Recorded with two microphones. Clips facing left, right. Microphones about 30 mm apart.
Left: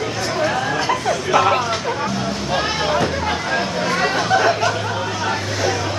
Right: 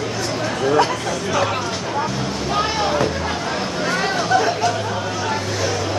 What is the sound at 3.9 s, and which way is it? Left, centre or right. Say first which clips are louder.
Chatter: left 1 dB; centre.